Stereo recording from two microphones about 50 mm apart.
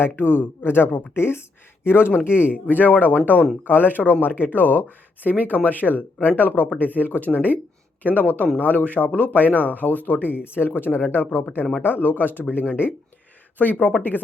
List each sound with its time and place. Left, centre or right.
0.0 s speech: left
1.1 s speech: left
2.7 s speech: left
13.6 s speech: left